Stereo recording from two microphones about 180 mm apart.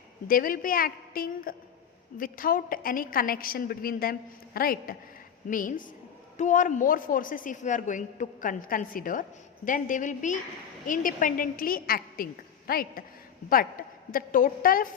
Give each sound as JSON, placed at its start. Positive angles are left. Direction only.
{"t": 0.3, "sound": "a woman's voice", "side_deg": 50}